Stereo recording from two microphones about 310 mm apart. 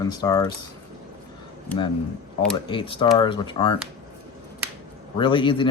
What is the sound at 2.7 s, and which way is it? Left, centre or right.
Speech, centre.